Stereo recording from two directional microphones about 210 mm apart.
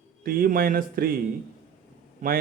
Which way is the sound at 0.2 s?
45° right (ahead or behind).